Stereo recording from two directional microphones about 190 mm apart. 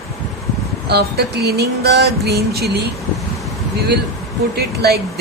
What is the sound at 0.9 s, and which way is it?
Speech, 60° right (ahead or behind).